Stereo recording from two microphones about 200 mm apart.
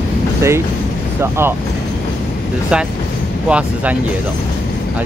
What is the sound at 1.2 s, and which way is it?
Speech, 10° right (ahead or behind).